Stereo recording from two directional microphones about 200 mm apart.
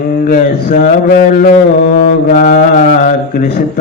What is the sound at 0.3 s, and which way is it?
Speech, 40° left (ahead or behind).